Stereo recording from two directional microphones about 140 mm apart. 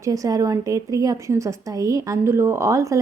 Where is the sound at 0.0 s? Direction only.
25° right (ahead or behind).